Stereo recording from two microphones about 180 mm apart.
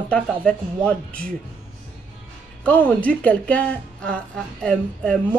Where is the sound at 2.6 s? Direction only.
10° left (ahead or behind).